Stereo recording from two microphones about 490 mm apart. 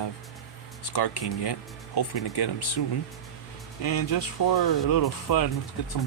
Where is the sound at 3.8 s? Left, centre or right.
Left.